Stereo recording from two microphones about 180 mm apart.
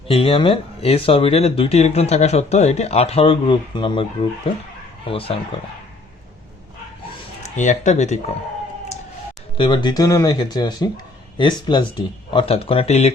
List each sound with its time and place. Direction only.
0.1 s speech: 30° left (ahead or behind)
7.4 s speech: 40° left (ahead or behind)
9.6 s speech: 25° left (ahead or behind)